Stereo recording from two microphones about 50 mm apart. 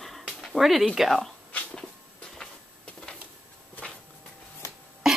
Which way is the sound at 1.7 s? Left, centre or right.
Centre.